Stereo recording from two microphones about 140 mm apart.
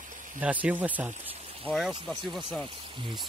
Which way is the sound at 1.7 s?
Centre (ahead or behind).